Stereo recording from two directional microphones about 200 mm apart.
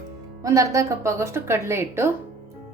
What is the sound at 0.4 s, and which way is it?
A woman's voice, 15° right (ahead or behind).